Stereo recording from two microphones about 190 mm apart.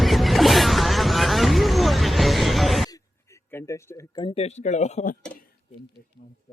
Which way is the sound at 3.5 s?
15° left (ahead or behind).